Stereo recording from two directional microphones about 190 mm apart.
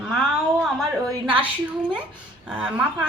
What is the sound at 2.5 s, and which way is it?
Speech, 5° right (ahead or behind).